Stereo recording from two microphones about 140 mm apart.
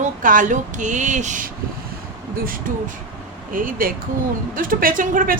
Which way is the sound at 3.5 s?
80° right.